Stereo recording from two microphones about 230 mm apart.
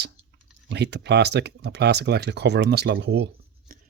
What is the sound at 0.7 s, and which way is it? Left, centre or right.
Speech, right.